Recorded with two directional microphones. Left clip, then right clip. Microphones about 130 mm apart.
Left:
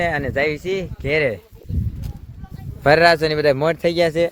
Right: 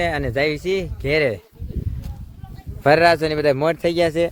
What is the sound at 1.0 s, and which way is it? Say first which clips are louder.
Speech: even; 45° right (ahead or behind).